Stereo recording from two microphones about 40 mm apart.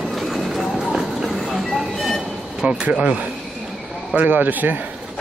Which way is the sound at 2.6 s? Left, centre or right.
Right.